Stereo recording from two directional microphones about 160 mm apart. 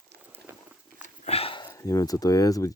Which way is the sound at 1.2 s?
40° left (ahead or behind).